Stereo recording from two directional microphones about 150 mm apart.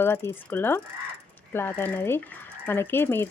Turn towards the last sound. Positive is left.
turn(degrees=15)  # may be behind; listen again after turning